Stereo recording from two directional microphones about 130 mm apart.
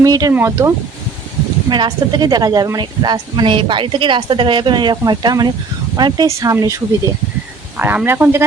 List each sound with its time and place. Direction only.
0.0 s speech: 25° right (ahead or behind)
1.7 s a woman's voice: 35° right (ahead or behind)